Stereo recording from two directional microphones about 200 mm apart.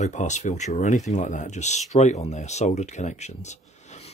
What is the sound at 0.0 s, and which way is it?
Speech, 35° left (ahead or behind).